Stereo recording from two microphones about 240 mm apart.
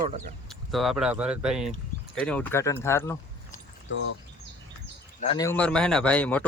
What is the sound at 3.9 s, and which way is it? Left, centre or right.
Speech, left.